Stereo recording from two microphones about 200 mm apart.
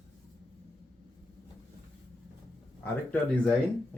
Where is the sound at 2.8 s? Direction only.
5° left (ahead or behind).